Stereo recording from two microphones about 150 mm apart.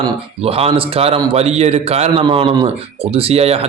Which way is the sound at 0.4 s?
40° right (ahead or behind).